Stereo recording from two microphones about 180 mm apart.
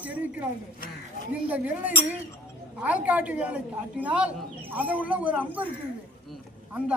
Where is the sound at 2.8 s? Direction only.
10° right (ahead or behind).